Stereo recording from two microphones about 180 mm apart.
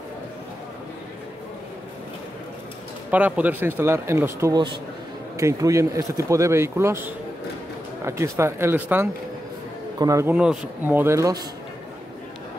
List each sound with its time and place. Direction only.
3.1 s speech: 10° right (ahead or behind)
10.3 s speech: 5° right (ahead or behind)